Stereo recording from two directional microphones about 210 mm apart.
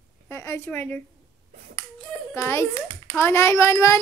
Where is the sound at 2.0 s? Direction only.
5° left (ahead or behind).